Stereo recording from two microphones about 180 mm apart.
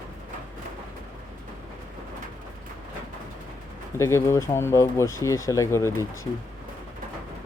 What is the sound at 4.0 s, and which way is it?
Speech, 15° left (ahead or behind).